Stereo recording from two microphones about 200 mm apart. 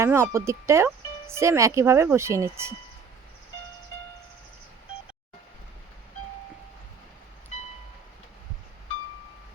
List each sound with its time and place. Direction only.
0.0 s speech: 10° right (ahead or behind)